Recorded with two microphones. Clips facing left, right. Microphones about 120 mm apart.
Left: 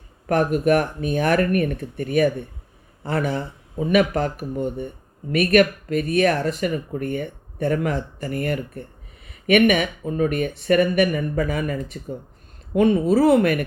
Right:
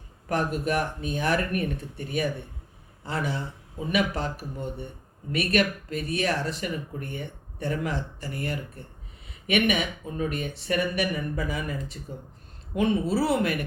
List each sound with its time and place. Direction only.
0.3 s speech: 55° left (ahead or behind)